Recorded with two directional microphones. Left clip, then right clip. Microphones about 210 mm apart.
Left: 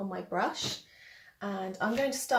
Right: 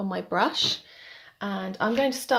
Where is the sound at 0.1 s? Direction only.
45° right (ahead or behind).